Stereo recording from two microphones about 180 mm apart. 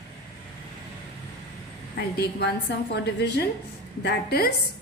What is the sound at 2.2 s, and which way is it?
A woman's voice, 70° left (ahead or behind).